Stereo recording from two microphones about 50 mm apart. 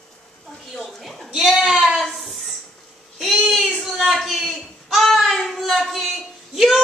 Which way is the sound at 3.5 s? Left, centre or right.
Centre.